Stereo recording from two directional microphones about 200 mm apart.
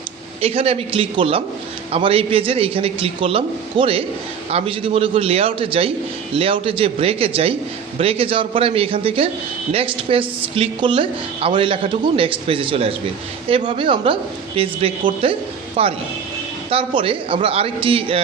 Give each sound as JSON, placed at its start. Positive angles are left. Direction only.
{"t": 0.4, "sound": "a woman's voice", "side_deg": -30}